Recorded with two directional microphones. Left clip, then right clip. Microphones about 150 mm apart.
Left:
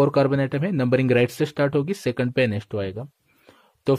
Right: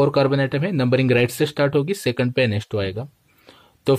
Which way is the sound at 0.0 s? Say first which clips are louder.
Right 2 dB; 40° left (ahead or behind).